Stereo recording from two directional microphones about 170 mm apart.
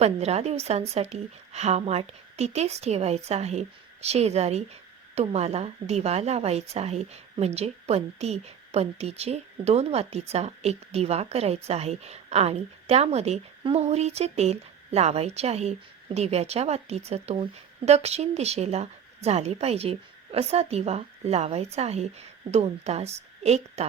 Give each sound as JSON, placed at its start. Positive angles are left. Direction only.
{"t": 0.0, "sound": "a woman's voice", "side_deg": -40}